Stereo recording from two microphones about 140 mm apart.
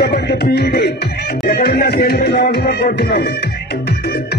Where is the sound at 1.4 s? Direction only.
90° left.